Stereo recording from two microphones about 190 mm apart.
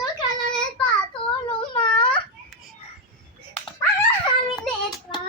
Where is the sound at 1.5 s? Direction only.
25° left (ahead or behind).